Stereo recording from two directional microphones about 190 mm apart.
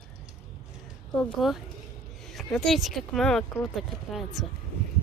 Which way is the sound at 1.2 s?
Centre (ahead or behind).